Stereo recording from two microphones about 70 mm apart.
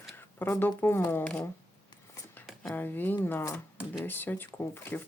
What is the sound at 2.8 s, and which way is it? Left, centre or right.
Speech, left.